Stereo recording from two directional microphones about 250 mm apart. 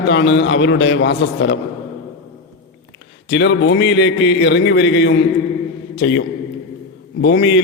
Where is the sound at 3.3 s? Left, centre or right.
Left.